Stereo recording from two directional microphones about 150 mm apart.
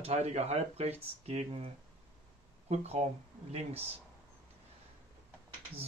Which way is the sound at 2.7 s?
45° right (ahead or behind).